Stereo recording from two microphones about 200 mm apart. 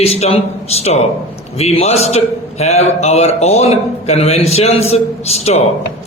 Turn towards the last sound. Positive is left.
turn(degrees=30)  # may be behind; listen again after turning